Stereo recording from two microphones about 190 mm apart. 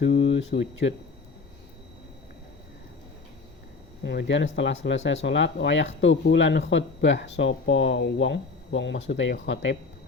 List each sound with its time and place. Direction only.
0.0 s speech: 75° left (ahead or behind)
4.0 s speech: 65° left (ahead or behind)